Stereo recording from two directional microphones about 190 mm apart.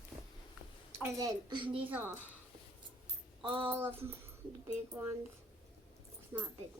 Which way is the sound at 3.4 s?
25° right (ahead or behind).